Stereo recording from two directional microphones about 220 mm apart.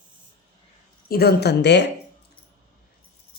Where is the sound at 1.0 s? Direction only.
45° left (ahead or behind).